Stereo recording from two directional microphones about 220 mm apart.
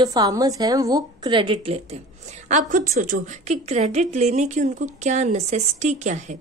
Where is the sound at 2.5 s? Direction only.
35° right (ahead or behind).